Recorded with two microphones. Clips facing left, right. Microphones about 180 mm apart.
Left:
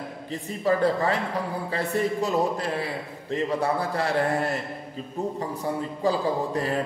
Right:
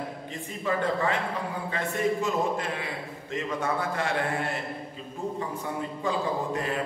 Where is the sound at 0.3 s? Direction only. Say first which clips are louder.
Left 7 dB; 35° left (ahead or behind).